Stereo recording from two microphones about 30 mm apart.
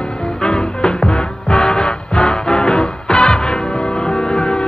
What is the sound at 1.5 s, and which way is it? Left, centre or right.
Music, left.